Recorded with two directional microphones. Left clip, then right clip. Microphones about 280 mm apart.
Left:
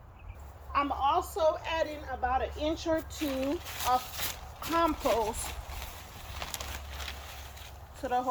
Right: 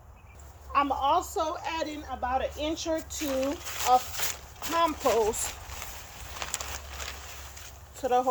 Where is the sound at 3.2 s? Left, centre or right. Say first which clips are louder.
Right 3 dB; centre.